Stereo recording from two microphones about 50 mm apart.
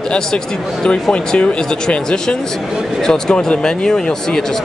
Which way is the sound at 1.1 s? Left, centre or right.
Left.